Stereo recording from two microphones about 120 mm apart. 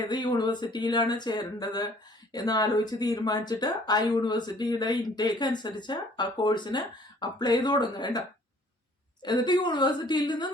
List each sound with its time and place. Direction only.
0.0 s speech: 40° left (ahead or behind)
9.2 s speech: 35° left (ahead or behind)